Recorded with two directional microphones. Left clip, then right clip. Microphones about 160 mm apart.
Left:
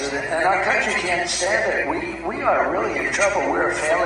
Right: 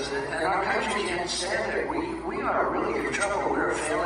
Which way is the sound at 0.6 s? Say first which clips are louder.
Left 6 dB; 20° right (ahead or behind).